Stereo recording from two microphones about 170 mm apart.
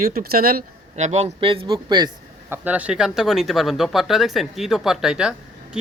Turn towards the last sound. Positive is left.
turn(degrees=-5)  # may be behind; listen again after turning